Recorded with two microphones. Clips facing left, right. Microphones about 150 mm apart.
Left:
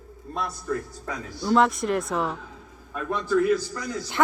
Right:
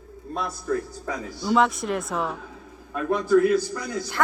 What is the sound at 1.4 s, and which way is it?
Speech, centre (ahead or behind).